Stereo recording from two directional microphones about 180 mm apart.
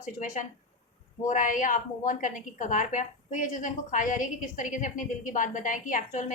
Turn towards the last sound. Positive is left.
turn(degrees=45)  # may be behind; listen again after turning